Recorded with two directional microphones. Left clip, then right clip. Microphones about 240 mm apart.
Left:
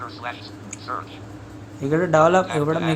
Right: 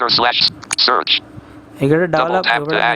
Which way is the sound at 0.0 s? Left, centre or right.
Right.